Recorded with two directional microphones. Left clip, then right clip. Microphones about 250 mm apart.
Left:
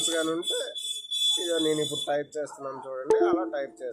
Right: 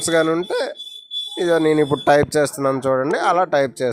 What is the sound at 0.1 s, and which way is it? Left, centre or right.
Speech, right.